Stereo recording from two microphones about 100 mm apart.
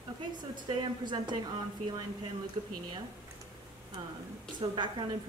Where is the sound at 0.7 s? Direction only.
50° right (ahead or behind).